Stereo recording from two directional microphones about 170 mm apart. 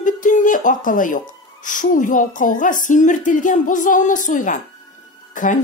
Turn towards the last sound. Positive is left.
turn(degrees=50)  # may be behind; listen again after turning